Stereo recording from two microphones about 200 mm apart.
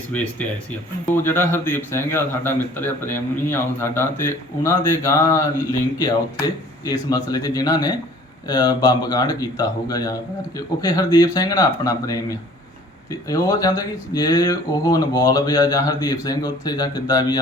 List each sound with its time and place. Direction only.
1.1 s a man's voice: 10° left (ahead or behind)